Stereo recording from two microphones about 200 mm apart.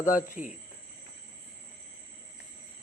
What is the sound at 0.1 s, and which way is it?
Speech, 40° left (ahead or behind).